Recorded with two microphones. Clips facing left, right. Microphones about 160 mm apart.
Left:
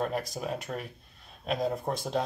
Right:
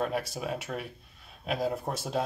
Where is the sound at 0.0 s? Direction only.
5° right (ahead or behind).